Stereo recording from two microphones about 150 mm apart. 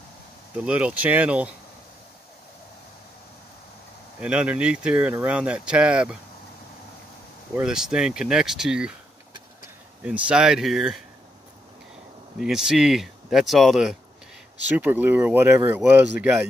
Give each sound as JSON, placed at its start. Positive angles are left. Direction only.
{"t": 0.7, "sound": "speech", "side_deg": -10}
{"t": 4.2, "sound": "speech", "side_deg": -5}
{"t": 7.5, "sound": "speech", "side_deg": -5}
{"t": 10.0, "sound": "speech", "side_deg": -5}
{"t": 12.4, "sound": "speech", "side_deg": -5}
{"t": 14.8, "sound": "speech", "side_deg": -10}